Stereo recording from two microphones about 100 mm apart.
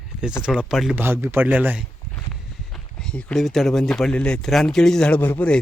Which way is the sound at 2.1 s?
5° left (ahead or behind).